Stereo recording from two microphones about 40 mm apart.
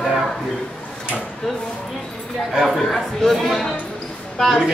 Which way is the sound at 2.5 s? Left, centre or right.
Centre.